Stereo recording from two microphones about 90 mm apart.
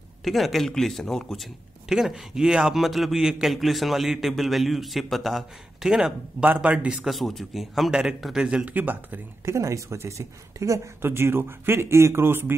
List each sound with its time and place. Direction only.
0.2 s a man's voice: centre (ahead or behind); by 7.0 s 15° right (ahead or behind)
7.1 s speech: centre (ahead or behind); by 9.2 s 20° right (ahead or behind)
9.4 s speech: 35° right (ahead or behind)